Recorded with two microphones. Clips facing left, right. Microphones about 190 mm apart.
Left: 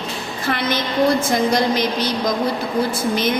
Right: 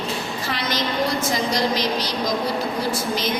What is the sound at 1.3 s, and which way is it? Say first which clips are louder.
Speech: left 4 dB; 55° left (ahead or behind).